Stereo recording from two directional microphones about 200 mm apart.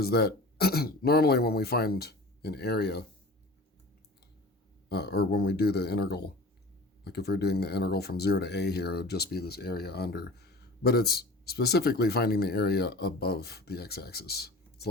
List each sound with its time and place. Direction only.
0.0 s speech: 50° left (ahead or behind)
4.9 s speech: 55° left (ahead or behind)